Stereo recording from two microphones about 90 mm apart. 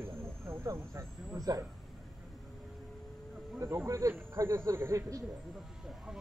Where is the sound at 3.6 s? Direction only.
30° right (ahead or behind).